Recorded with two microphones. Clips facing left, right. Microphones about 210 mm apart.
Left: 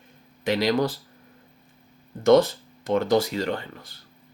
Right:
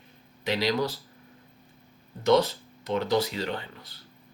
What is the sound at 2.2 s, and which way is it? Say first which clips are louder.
Speech: left 5 dB; 50° left (ahead or behind).